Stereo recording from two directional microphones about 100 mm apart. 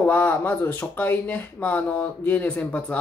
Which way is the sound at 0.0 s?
20° left (ahead or behind).